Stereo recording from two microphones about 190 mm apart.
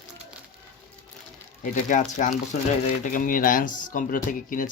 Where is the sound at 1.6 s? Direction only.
40° left (ahead or behind).